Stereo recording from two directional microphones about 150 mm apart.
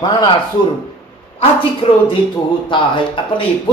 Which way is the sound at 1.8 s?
40° left (ahead or behind).